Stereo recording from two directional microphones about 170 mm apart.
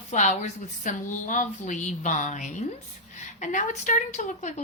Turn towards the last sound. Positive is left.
turn(degrees=45)  # may be behind; listen again after turning